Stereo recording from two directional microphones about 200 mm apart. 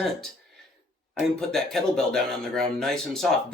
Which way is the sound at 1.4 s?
Centre (ahead or behind).